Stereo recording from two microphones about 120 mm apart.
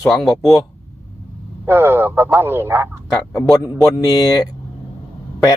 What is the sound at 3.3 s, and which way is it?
Speech, 30° left (ahead or behind).